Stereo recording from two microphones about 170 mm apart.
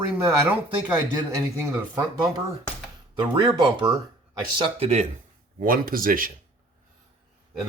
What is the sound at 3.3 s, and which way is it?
Speech, 30° right (ahead or behind).